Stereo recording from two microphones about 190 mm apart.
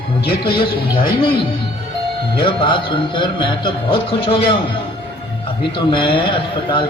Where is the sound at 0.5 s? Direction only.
25° left (ahead or behind).